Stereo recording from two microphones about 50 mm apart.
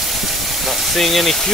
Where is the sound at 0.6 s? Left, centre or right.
Centre.